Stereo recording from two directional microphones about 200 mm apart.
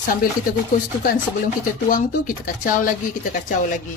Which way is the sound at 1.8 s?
45° left (ahead or behind).